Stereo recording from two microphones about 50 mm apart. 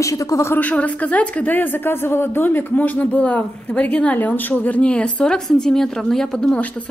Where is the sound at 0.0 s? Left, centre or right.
Left.